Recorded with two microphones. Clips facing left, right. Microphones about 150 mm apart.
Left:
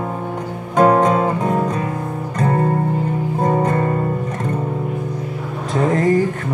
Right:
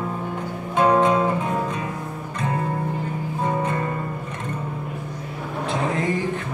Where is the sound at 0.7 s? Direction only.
45° left (ahead or behind).